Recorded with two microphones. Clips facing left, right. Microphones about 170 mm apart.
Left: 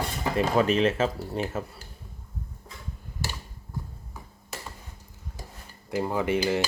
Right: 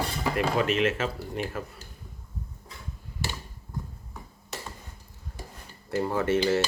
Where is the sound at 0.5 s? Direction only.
35° left (ahead or behind).